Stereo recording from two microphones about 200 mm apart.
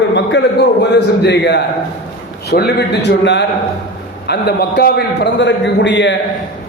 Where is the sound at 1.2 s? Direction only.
60° left (ahead or behind).